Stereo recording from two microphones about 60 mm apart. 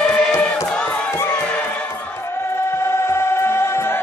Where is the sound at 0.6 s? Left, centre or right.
Centre.